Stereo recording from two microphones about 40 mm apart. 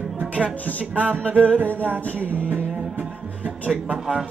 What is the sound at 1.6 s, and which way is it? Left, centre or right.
Music, right.